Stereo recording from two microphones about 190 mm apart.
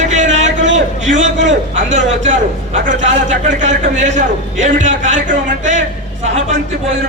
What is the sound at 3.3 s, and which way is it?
A man's voice, 40° right (ahead or behind).